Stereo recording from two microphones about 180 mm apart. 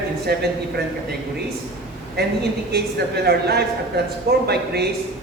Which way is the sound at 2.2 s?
60° right (ahead or behind).